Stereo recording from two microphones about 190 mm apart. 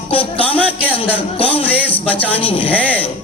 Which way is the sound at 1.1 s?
30° left (ahead or behind).